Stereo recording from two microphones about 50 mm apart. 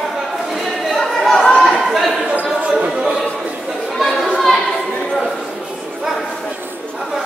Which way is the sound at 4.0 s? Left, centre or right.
Centre.